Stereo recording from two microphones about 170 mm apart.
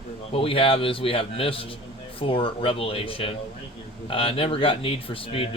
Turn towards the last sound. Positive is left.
turn(degrees=35)  # may be behind; listen again after turning